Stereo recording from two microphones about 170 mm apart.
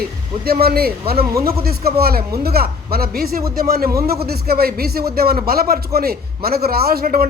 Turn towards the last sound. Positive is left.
turn(degrees=-60)  # may be behind; listen again after turning